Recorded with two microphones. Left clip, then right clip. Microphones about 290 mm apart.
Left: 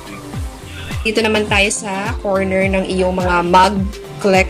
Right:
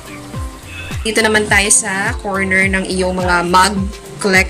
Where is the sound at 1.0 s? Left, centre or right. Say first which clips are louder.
Right 2 dB; centre.